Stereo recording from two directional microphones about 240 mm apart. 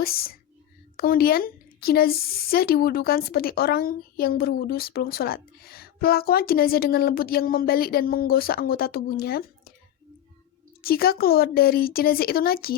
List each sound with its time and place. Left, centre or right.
0.0 s speech: left
10.8 s speech: left